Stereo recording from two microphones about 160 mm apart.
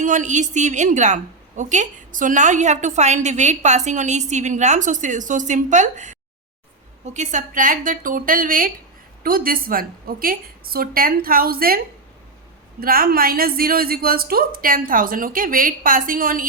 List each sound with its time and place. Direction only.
0.0 s a woman's voice: 50° right (ahead or behind); by 11.8 s 70° right (ahead or behind)
12.8 s a woman's voice: 65° right (ahead or behind)